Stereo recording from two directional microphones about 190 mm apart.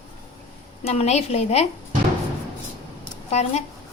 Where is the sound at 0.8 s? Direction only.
35° left (ahead or behind).